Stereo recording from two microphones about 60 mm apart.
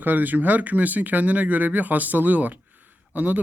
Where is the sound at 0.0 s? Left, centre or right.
Right.